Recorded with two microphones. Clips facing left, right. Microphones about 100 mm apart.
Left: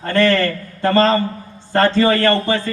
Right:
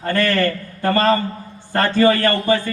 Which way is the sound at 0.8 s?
25° left (ahead or behind).